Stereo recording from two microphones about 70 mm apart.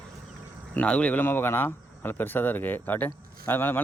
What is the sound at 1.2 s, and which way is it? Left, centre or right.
Speech, left.